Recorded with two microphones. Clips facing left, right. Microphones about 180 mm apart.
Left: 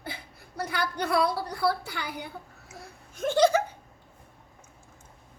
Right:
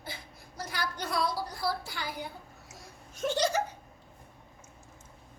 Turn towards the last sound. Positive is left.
turn(degrees=55)  # may be behind; listen again after turning